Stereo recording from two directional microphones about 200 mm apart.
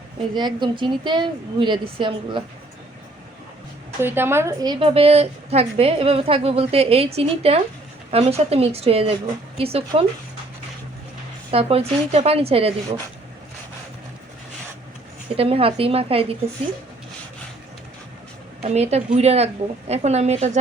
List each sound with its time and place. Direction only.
0.3 s a woman's voice: 20° right (ahead or behind)
4.0 s a woman's voice: 10° right (ahead or behind); by 10.1 s 30° right (ahead or behind)
11.5 s a woman's voice: 30° right (ahead or behind)
15.4 s a woman's voice: 30° right (ahead or behind)
18.6 s a woman's voice: 30° right (ahead or behind)